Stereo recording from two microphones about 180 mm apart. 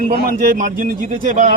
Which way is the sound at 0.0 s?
50° right (ahead or behind).